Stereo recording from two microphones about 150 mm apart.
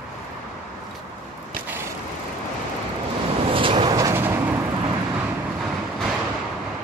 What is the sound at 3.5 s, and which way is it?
Vehicle, 35° right (ahead or behind).